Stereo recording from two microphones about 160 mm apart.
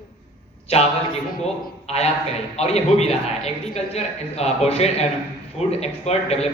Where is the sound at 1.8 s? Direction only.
40° left (ahead or behind).